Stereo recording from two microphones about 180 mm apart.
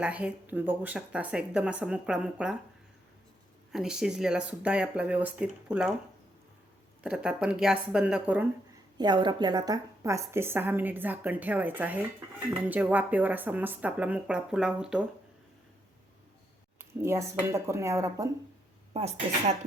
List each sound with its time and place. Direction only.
0.0 s a woman's voice: 5° right (ahead or behind)
3.7 s speech: 5° right (ahead or behind)
7.0 s speech: 5° right (ahead or behind)
9.0 s a woman's voice: 25° right (ahead or behind); by 15.0 s 5° right (ahead or behind)
17.0 s a woman's voice: 15° right (ahead or behind)